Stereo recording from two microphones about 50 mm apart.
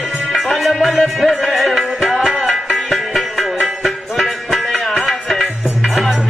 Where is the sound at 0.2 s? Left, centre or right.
Centre.